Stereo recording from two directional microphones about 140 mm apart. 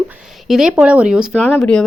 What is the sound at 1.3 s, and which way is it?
Speech, 10° left (ahead or behind).